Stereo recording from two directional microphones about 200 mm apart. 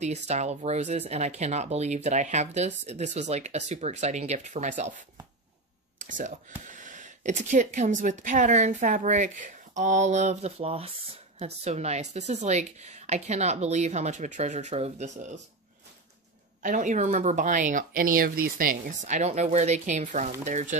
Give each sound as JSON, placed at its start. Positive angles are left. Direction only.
{"t": 0.0, "sound": "speech", "side_deg": -35}
{"t": 16.6, "sound": "speech", "side_deg": -40}